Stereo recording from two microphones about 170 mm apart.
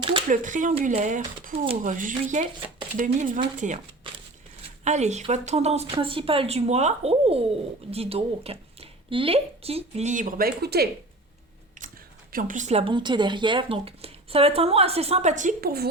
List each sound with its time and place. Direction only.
0.0 s a sound: 30° right (ahead or behind)
0.3 s speech: 50° right (ahead or behind)
4.8 s speech: 40° right (ahead or behind); by 10.8 s 70° right (ahead or behind)
12.3 s speech: 55° right (ahead or behind)